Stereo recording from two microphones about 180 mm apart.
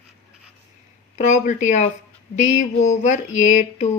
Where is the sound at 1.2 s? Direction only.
40° left (ahead or behind).